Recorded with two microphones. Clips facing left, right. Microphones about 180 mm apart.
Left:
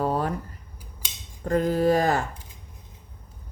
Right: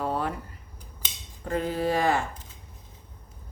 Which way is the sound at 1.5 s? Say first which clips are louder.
Left 6 dB; 45° left (ahead or behind).